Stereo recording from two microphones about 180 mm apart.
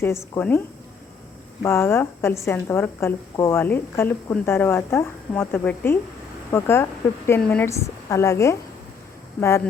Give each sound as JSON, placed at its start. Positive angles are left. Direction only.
{"t": 0.3, "sound": "a woman's voice", "side_deg": 10}
{"t": 1.6, "sound": "a woman's voice", "side_deg": 15}